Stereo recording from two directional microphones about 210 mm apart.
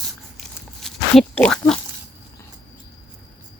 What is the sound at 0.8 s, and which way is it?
Pig, 5° left (ahead or behind).